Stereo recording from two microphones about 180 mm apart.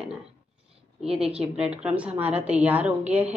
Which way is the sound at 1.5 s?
5° right (ahead or behind).